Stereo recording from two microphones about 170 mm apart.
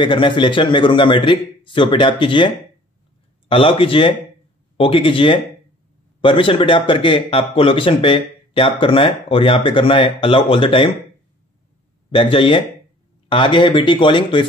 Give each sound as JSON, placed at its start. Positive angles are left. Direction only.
{"t": 0.0, "sound": "a man's voice", "side_deg": 30}
{"t": 12.1, "sound": "a man's voice", "side_deg": 30}